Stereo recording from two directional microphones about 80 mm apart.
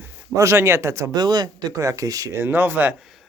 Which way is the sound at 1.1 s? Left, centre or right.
Right.